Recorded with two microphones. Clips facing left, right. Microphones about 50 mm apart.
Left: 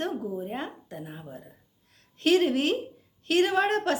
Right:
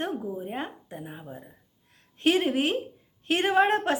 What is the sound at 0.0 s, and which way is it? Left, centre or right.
A woman's voice, centre.